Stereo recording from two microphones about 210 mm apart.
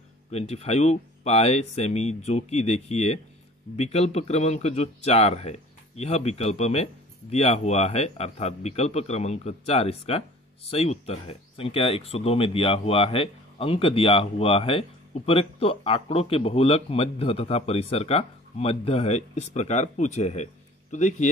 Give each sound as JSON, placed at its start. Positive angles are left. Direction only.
{"t": 0.3, "sound": "a man's voice", "side_deg": 30}